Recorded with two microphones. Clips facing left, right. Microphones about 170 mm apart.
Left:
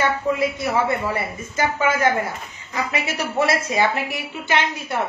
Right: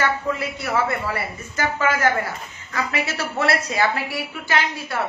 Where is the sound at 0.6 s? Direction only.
20° left (ahead or behind).